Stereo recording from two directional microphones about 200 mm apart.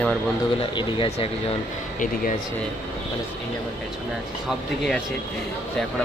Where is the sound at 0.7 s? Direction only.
25° left (ahead or behind).